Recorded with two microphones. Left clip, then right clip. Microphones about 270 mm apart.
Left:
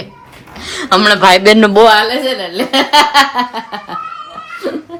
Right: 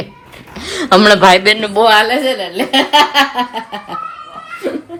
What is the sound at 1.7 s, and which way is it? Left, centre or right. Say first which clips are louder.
Speech: left 5 dB; left.